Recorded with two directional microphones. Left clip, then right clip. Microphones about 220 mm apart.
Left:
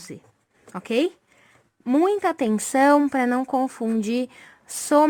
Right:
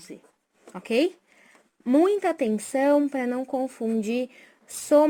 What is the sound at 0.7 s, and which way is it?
Speech, 20° left (ahead or behind).